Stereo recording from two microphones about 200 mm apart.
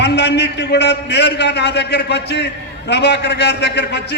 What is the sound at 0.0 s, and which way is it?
A man's voice, 55° left (ahead or behind).